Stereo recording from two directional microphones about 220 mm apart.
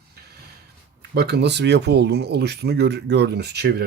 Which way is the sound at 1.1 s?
50° right (ahead or behind).